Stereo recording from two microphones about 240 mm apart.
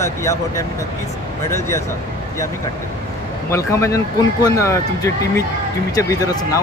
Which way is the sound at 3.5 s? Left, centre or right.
Centre.